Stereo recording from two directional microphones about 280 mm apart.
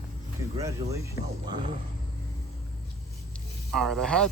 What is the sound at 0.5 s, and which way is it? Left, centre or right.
Speech, centre.